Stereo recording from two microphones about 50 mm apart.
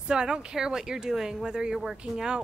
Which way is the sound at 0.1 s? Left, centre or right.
Centre.